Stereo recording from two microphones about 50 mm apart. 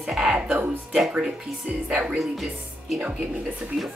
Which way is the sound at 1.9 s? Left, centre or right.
Centre.